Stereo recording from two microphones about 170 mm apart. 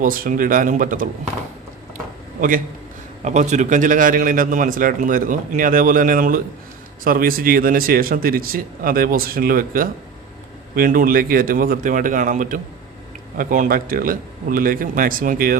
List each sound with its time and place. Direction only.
0.0 s a man's voice: 55° right (ahead or behind)
3.2 s a man's voice: 45° right (ahead or behind)